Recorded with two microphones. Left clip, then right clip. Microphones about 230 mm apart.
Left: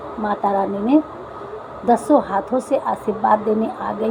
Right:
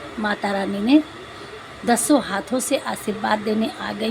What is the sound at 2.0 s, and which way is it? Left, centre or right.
A woman's voice, right.